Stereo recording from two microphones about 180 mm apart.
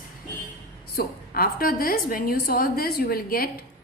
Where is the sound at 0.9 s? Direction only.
55° left (ahead or behind).